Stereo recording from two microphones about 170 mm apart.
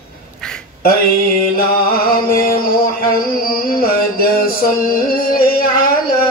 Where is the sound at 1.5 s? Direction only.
60° left (ahead or behind).